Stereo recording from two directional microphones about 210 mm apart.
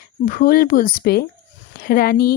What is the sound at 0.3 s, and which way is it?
Speech, 45° left (ahead or behind).